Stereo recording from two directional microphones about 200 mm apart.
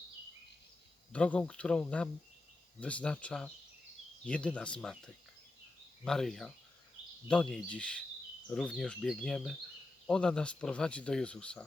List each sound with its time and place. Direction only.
1.1 s speech: 5° left (ahead or behind)